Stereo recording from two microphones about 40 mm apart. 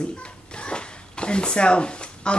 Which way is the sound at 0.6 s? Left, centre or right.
Left.